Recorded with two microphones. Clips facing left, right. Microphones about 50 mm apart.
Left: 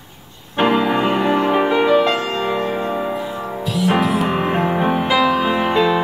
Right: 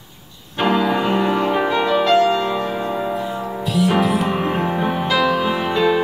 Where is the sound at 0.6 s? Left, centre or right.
Centre.